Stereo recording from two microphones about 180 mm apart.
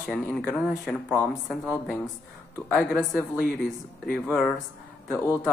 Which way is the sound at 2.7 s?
5° right (ahead or behind).